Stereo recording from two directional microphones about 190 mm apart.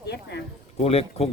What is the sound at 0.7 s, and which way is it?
Speech, 30° left (ahead or behind).